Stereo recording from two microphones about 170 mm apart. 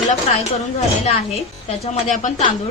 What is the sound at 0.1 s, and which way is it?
Speech, 40° left (ahead or behind).